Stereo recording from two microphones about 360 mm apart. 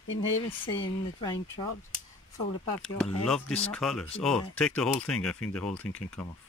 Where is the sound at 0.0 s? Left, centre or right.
Left.